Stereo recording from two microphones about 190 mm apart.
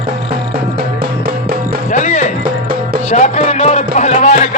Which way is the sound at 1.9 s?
40° left (ahead or behind).